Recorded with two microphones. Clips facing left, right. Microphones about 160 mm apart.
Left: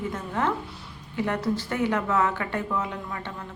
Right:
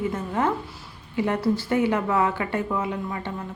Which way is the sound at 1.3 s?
10° right (ahead or behind).